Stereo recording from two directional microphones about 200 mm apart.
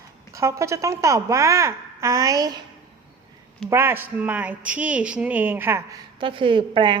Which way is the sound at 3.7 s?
10° right (ahead or behind).